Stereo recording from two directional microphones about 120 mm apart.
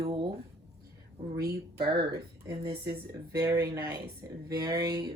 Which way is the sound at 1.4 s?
30° right (ahead or behind).